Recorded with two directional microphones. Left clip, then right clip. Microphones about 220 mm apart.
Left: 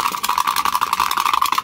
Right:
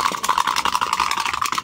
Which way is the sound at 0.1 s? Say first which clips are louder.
Left 1 dB; 5° left (ahead or behind).